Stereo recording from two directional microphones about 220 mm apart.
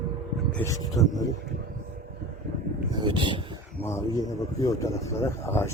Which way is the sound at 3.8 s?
15° left (ahead or behind).